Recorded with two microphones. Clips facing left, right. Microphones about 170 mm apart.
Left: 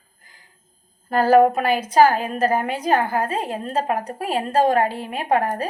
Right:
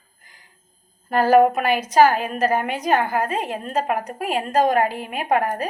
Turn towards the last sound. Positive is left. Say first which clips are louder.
# even
turn(degrees=35)  # may be behind; listen again after turning